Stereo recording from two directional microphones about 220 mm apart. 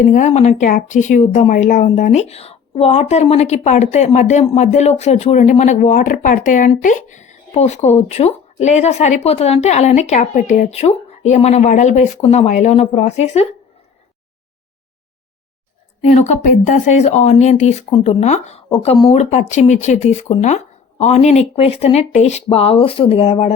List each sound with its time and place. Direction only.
0.0 s speech: 35° left (ahead or behind)
16.9 s speech: 30° left (ahead or behind)